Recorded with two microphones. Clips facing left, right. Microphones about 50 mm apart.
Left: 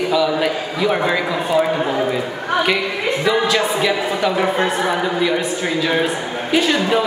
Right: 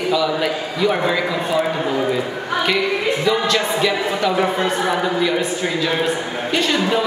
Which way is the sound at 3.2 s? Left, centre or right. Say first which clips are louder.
Left 4 dB; centre.